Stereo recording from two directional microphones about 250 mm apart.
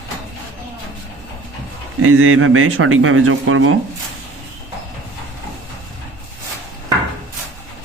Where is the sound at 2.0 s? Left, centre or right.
Right.